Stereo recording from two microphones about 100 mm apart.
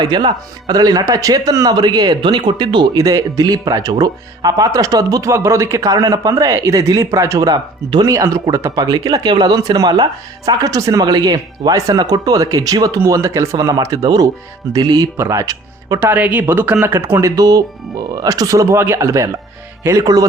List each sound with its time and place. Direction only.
0.0 s speech: 45° right (ahead or behind)
2.9 s speech: 35° right (ahead or behind)
8.0 s speech: 35° right (ahead or behind)
16.0 s speech: 15° right (ahead or behind)